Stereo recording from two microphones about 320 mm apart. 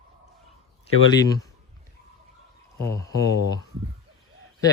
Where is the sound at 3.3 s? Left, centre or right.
Left.